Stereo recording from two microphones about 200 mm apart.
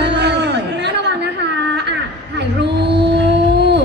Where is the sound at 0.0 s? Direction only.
60° right (ahead or behind).